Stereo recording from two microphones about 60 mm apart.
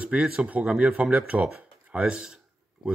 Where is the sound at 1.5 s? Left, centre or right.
Centre.